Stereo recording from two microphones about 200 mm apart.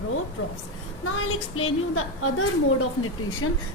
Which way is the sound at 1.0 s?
90° left.